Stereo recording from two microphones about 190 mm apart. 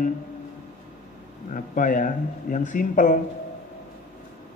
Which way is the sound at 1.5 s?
45° left (ahead or behind).